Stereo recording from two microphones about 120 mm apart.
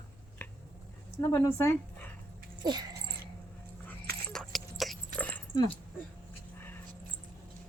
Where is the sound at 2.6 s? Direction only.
35° right (ahead or behind).